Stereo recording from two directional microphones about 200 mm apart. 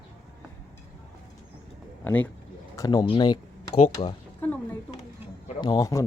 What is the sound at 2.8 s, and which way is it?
Speech, 20° left (ahead or behind).